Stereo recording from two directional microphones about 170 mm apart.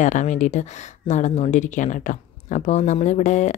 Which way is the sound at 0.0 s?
45° left (ahead or behind).